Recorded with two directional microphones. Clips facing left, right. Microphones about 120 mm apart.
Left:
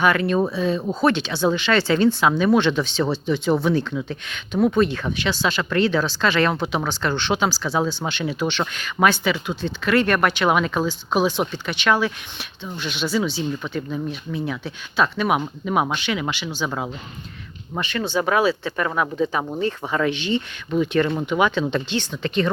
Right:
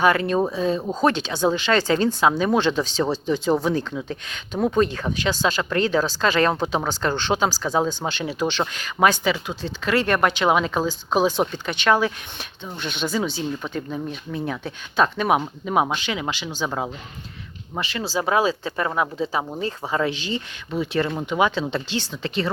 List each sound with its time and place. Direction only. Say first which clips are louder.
0.0 s speech: even; 35° right (ahead or behind)
10.8 s speech: even; 35° right (ahead or behind)
12.7 s speech: left 2 dB; 45° right (ahead or behind)
13.6 s speech: left 1 dB; 35° right (ahead or behind)
15.4 s speech: even; 25° right (ahead or behind)
20.7 s speech: left 3 dB; 25° right (ahead or behind)